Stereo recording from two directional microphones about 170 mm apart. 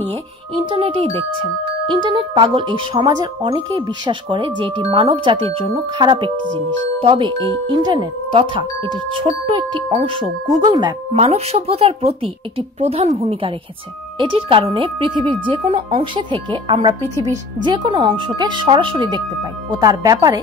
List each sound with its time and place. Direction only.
0.6 s speech: 35° right (ahead or behind)
6.4 s music: 90° right
7.0 s speech: 30° right (ahead or behind)
10.6 s speech: 25° right (ahead or behind)
11.1 s speech: 40° right (ahead or behind); by 20.3 s 20° right (ahead or behind)